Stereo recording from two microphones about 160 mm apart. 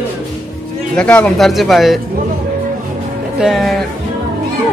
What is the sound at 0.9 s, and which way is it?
A man's voice, 5° left (ahead or behind).